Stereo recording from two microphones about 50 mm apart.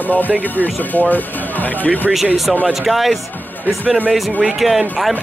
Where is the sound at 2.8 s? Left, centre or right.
Centre.